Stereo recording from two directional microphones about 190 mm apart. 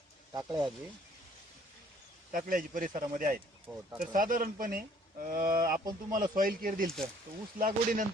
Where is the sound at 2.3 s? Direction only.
45° right (ahead or behind).